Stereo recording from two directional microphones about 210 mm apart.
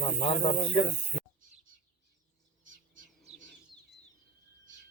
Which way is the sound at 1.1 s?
35° left (ahead or behind).